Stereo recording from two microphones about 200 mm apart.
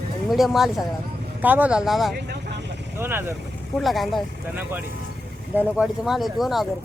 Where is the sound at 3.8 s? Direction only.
Centre (ahead or behind).